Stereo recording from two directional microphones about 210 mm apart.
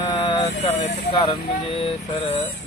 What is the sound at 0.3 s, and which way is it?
Speech, 25° left (ahead or behind).